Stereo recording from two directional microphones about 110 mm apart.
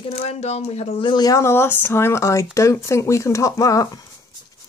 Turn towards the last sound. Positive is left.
turn(degrees=30)  # may be behind; listen again after turning